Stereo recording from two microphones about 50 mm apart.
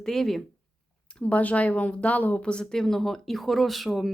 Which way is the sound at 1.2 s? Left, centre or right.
Left.